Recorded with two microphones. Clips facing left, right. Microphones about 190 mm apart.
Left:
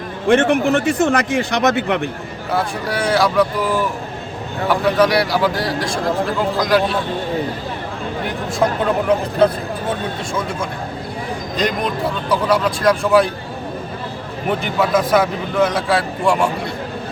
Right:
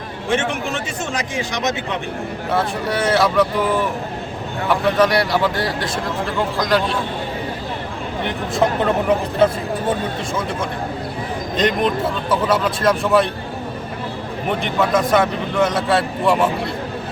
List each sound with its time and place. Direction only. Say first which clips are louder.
0.3 s speech: left 8 dB; 55° left (ahead or behind)
2.5 s a man's voice: even; centre (ahead or behind)
8.2 s a man's voice: even; centre (ahead or behind)
11.5 s a man's voice: right 3 dB; centre (ahead or behind)
14.6 s a man's voice: even; centre (ahead or behind)